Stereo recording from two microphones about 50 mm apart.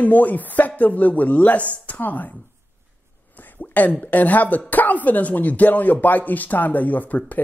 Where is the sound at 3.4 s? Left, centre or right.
Left.